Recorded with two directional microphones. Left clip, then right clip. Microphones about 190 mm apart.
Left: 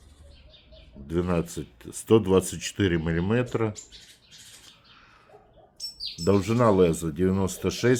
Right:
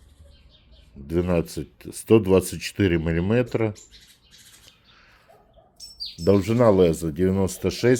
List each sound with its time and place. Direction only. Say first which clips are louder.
1.0 s speech: right 4 dB; 25° right (ahead or behind)
6.2 s speech: right 4 dB; 30° right (ahead or behind)